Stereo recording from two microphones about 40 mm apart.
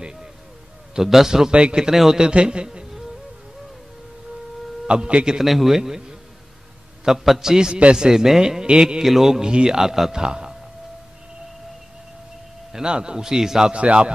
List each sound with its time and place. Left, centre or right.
1.0 s a man's voice: centre
1.5 s a man's voice: right
1.9 s a man's voice: centre
4.8 s a man's voice: right
5.4 s a man's voice: centre
5.8 s a man's voice: centre
8.8 s a man's voice: centre
9.4 s a man's voice: right
12.7 s a man's voice: centre
13.7 s a man's voice: right